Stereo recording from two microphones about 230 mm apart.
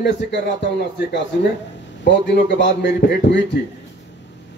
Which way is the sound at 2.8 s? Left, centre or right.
Left.